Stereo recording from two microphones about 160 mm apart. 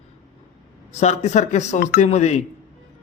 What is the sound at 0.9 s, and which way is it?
A man's voice, 45° left (ahead or behind).